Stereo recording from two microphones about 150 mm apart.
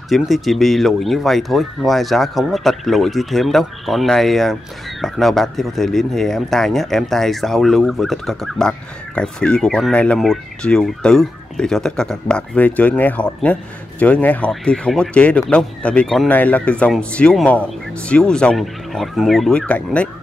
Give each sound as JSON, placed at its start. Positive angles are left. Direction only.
{"t": 0.1, "sound": "speech", "side_deg": 0}